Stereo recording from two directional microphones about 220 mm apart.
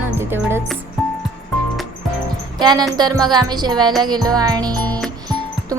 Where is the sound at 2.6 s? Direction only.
20° right (ahead or behind).